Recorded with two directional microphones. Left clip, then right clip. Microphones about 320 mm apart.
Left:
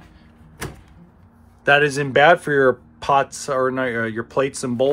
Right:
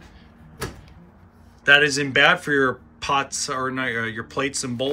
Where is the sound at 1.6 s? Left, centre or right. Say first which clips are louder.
Even; centre.